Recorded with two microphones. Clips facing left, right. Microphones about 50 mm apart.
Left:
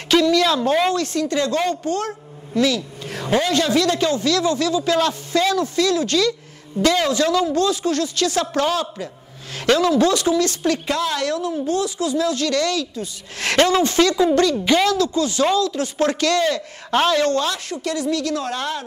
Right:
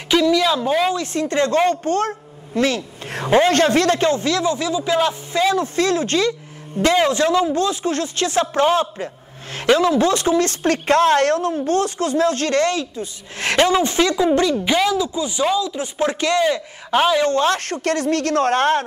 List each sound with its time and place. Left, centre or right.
0.1 s speech: centre
1.0 s a woman's voice: right; by 17.3 s centre
17.3 s speech: right
17.6 s speech: right